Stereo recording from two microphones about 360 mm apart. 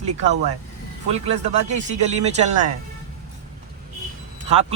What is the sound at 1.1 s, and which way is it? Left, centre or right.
Speech, centre.